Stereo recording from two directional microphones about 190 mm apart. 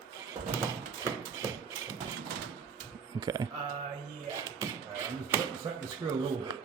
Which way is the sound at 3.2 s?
20° right (ahead or behind).